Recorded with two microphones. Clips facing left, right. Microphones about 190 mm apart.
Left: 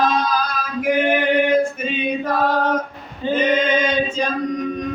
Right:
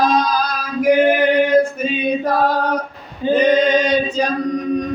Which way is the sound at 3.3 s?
35° right (ahead or behind).